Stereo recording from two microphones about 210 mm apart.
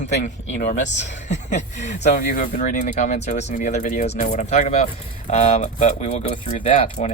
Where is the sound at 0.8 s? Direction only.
35° left (ahead or behind).